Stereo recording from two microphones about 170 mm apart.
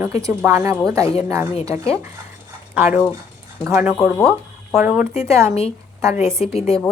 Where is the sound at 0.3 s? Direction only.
15° right (ahead or behind).